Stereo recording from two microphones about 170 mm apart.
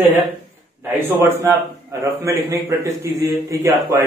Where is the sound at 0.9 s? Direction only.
15° right (ahead or behind).